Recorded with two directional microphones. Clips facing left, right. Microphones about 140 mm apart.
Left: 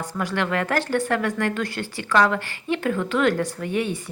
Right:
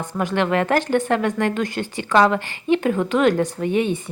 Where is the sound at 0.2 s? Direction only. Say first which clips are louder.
Right 5 dB; 20° right (ahead or behind).